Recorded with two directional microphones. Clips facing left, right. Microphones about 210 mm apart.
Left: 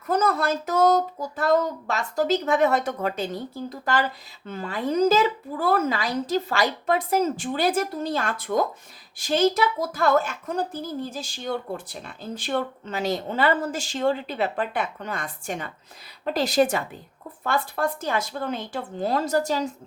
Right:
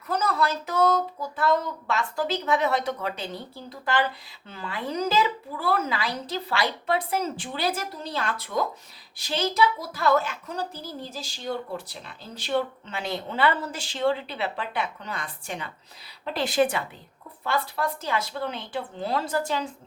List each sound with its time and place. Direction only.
0.1 s speech: 50° left (ahead or behind)